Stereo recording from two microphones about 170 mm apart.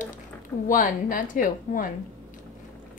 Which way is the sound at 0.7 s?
50° left (ahead or behind).